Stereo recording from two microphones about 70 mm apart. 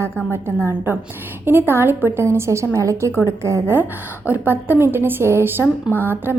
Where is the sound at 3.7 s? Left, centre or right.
Right.